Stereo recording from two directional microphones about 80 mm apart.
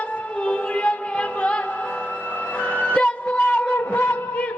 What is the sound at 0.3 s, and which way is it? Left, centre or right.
Music, centre.